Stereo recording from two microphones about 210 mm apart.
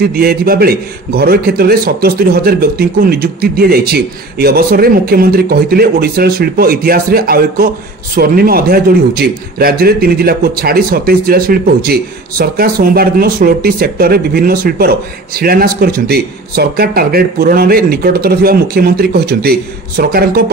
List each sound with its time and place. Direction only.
0.0 s a man's voice: 45° right (ahead or behind)